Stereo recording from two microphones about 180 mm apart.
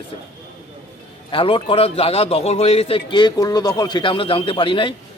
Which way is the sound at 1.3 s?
30° left (ahead or behind).